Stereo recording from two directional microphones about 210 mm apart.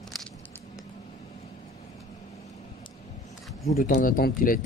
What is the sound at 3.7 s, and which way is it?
Speech, 40° left (ahead or behind).